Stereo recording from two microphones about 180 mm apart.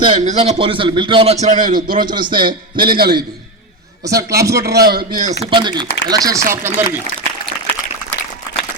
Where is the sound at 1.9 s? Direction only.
25° right (ahead or behind).